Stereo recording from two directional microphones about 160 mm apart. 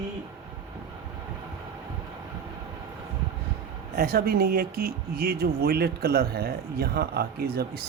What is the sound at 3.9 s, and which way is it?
Speech, 70° right (ahead or behind).